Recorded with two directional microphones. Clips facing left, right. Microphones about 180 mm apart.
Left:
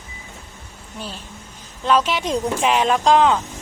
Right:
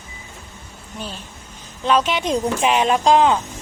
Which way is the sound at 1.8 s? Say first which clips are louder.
Even; centre (ahead or behind).